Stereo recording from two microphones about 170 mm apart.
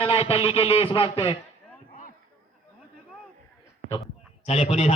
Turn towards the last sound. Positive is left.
turn(degrees=40)  # may be behind; listen again after turning